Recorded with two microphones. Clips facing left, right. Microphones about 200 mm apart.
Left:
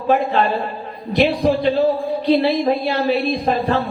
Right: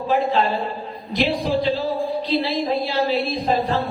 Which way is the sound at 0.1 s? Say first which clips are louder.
Left 3 dB; 60° left (ahead or behind).